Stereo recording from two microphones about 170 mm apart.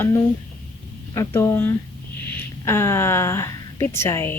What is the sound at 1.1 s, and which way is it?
A woman's voice, 15° left (ahead or behind).